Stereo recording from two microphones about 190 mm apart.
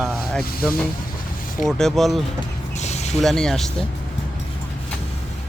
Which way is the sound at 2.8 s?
35° left (ahead or behind).